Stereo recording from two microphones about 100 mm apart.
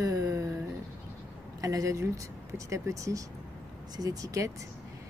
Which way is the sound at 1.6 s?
35° right (ahead or behind).